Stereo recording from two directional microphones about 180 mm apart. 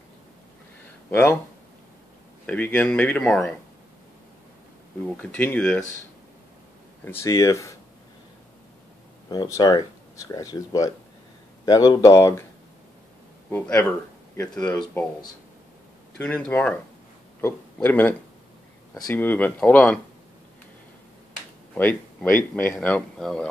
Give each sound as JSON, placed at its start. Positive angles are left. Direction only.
{"t": 1.1, "sound": "speech", "side_deg": 10}
{"t": 2.4, "sound": "speech", "side_deg": 10}
{"t": 5.2, "sound": "speech", "side_deg": 10}
{"t": 7.1, "sound": "speech", "side_deg": 15}
{"t": 9.3, "sound": "speech", "side_deg": 20}
{"t": 13.5, "sound": "speech", "side_deg": 10}
{"t": 16.2, "sound": "speech", "side_deg": 10}
{"t": 21.7, "sound": "speech", "side_deg": 10}